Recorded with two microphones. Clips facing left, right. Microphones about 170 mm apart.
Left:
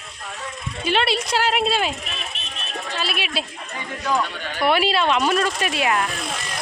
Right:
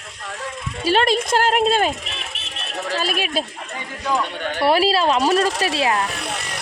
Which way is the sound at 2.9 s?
40° right (ahead or behind).